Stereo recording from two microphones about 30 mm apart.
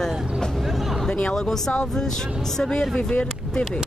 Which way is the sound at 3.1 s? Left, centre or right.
Left.